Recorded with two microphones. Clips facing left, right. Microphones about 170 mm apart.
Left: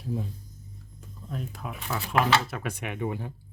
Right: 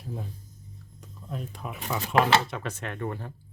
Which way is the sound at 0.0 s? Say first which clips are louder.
Left 5 dB; centre (ahead or behind).